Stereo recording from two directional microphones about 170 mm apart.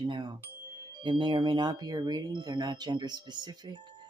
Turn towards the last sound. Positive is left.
turn(degrees=-25)  # may be behind; listen again after turning